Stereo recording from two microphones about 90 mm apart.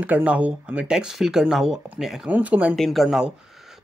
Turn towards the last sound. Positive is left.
turn(degrees=-5)  # may be behind; listen again after turning